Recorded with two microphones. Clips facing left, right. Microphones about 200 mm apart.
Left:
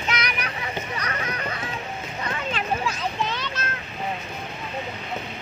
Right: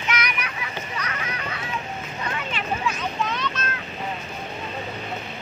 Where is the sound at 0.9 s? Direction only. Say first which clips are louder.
Left 2 dB; 35° left (ahead or behind).